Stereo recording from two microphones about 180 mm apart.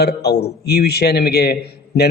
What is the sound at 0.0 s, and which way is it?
A man's voice, 65° left (ahead or behind).